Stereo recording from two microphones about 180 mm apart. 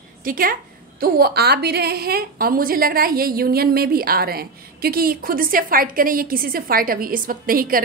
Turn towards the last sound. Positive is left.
turn(degrees=-50)  # may be behind; listen again after turning